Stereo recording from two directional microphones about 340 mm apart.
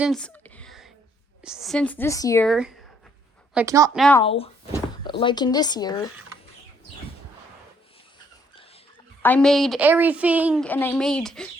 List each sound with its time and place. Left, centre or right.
0.0 s a sound: centre
1.4 s a woman's voice: centre
4.2 s speech: centre
9.2 s a woman's voice: centre